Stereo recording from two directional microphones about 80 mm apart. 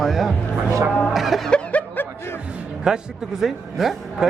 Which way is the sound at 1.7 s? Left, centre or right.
Centre.